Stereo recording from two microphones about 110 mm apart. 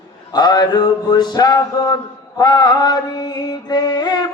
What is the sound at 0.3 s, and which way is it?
Mantra, 40° left (ahead or behind).